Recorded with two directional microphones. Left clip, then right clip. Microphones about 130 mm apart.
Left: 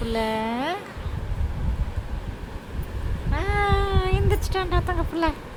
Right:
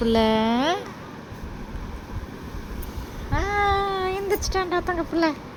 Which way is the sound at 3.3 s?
15° right (ahead or behind).